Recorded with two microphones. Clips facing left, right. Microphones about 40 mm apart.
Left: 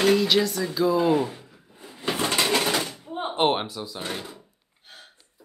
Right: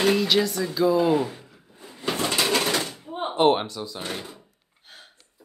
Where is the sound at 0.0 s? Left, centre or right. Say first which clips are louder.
Left 1 dB; centre.